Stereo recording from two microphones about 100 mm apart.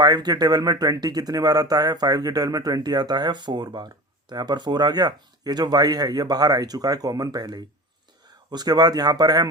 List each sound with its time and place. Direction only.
0.0 s speech: 45° right (ahead or behind)